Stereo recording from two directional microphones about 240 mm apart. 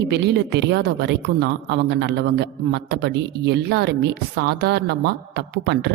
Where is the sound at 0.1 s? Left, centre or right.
Right.